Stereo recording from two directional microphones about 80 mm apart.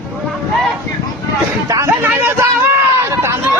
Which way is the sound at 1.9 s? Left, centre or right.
Right.